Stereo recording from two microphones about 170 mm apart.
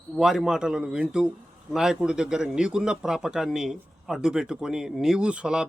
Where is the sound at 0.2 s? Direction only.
Centre (ahead or behind).